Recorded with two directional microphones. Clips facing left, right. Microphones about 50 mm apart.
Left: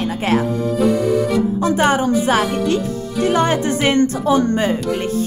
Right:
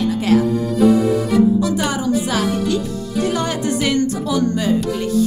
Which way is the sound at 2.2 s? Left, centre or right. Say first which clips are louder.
Left 3 dB; left.